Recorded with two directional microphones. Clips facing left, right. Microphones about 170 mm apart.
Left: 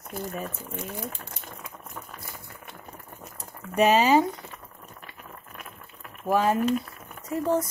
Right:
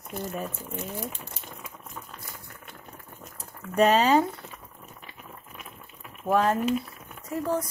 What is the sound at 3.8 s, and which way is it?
Speech, 5° left (ahead or behind).